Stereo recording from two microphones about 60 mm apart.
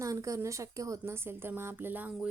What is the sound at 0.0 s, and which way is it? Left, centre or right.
Speech, right.